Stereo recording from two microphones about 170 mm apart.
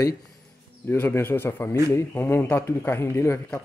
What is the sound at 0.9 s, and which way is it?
Speech, 10° left (ahead or behind).